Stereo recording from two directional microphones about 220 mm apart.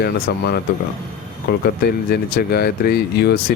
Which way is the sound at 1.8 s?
45° left (ahead or behind).